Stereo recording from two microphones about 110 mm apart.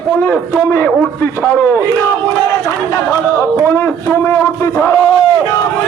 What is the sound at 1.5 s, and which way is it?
Battle cry, 15° left (ahead or behind).